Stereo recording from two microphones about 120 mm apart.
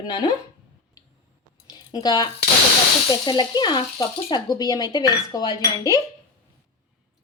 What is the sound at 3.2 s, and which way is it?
A woman's voice, 35° left (ahead or behind).